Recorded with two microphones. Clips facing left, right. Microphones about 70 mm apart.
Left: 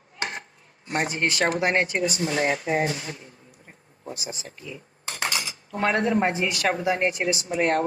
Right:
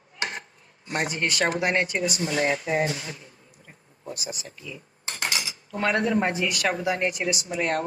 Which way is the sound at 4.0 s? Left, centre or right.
Left.